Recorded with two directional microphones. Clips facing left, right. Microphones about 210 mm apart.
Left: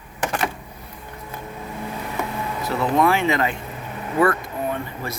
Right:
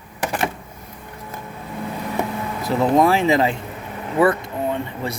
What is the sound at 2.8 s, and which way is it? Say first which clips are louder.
Speech: right 3 dB; 35° right (ahead or behind).